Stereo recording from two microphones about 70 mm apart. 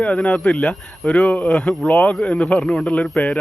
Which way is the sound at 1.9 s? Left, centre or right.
Centre.